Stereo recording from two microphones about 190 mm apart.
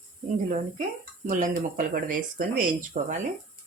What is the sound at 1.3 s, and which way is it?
Speech, 45° right (ahead or behind).